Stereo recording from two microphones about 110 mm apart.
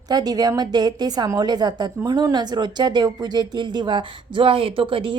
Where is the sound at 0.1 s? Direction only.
35° right (ahead or behind).